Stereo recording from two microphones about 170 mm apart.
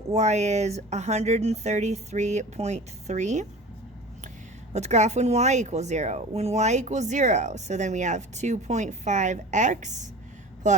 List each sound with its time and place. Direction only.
0.1 s speech: 40° right (ahead or behind)
4.7 s speech: 40° right (ahead or behind)